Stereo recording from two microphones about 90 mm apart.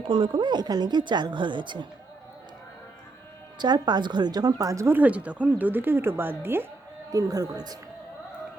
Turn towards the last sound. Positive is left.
turn(degrees=-45)  # may be behind; listen again after turning